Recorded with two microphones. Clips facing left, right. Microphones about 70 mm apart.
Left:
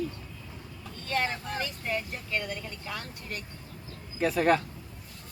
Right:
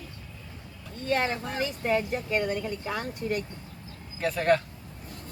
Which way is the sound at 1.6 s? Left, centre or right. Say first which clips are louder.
Right 10 dB; right.